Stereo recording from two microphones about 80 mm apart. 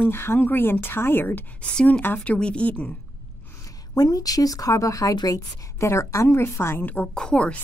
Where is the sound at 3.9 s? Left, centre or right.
Left.